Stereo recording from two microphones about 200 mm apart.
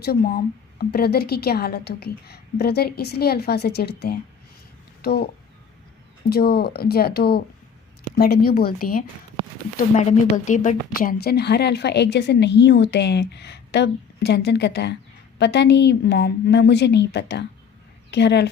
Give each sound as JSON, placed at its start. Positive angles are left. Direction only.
{"t": 0.0, "sound": "a woman's voice", "side_deg": 50}
{"t": 9.7, "sound": "a woman's voice", "side_deg": 35}